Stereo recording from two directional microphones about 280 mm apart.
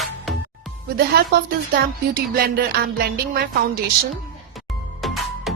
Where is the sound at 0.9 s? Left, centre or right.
Right.